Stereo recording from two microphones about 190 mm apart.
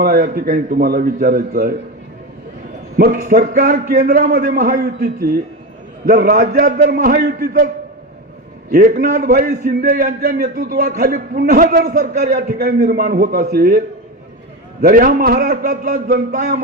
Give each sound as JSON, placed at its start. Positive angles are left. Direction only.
{"t": 0.0, "sound": "a man's voice", "side_deg": -50}
{"t": 3.0, "sound": "a man's voice", "side_deg": -45}
{"t": 8.7, "sound": "a man's voice", "side_deg": -45}
{"t": 14.8, "sound": "a man's voice", "side_deg": -50}